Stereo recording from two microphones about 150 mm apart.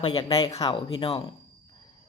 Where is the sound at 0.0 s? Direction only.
35° left (ahead or behind).